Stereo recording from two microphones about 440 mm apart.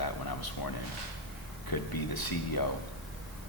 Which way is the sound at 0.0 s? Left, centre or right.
Left.